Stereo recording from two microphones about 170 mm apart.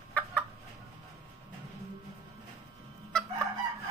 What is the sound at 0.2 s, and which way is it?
Chicken, 10° left (ahead or behind).